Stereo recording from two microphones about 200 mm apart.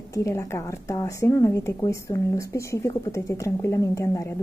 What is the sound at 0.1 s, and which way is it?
A woman's voice, 15° left (ahead or behind).